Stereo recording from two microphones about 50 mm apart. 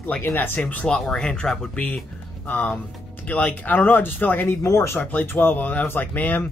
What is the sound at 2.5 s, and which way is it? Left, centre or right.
Speech, left.